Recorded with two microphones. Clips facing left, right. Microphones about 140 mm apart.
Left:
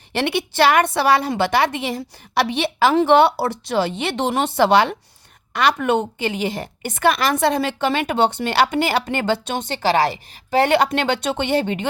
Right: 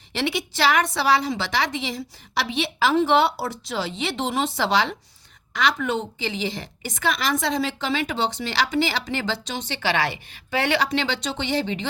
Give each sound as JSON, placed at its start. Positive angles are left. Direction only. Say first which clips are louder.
{"t": 0.1, "sound": "a woman's voice", "louder": "left 4 dB", "side_deg": 60}